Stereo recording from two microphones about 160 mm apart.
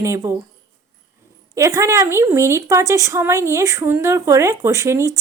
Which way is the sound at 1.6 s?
20° right (ahead or behind).